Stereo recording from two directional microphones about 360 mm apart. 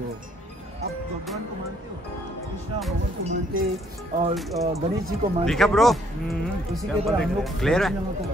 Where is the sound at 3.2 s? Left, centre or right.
Centre.